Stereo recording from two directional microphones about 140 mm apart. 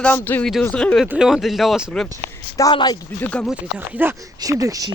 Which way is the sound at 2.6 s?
30° left (ahead or behind).